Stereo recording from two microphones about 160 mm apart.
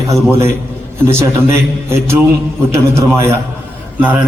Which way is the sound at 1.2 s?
15° right (ahead or behind).